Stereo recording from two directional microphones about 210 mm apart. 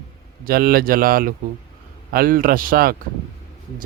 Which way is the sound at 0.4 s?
45° right (ahead or behind).